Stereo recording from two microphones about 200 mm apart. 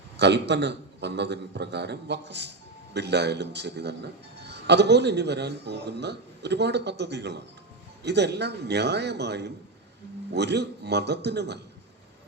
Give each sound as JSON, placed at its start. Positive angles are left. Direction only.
{"t": 0.2, "sound": "a man's voice", "side_deg": -60}